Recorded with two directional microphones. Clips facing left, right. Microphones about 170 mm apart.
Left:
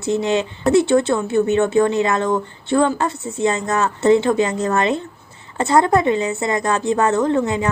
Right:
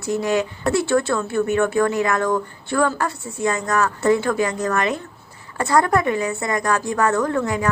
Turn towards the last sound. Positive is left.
turn(degrees=25)  # may be behind; listen again after turning